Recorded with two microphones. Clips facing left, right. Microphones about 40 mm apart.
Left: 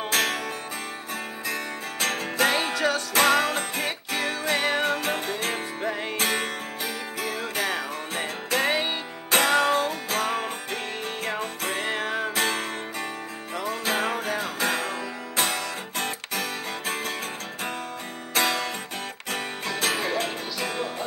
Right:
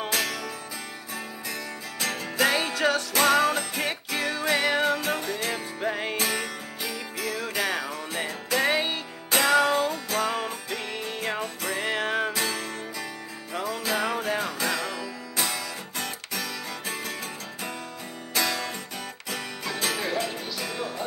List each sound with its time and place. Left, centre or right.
0.1 s music: left
1.5 s music: left
2.5 s music: left
3.1 s music: left
5.9 s music: centre
6.1 s music: left
8.6 s music: left
9.3 s music: left
11.9 s music: right
12.3 s music: left
13.7 s music: left
18.3 s music: left